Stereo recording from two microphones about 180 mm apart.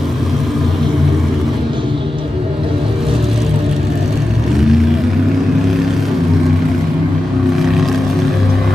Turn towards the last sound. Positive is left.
turn(degrees=0)  # may be behind; listen again after turning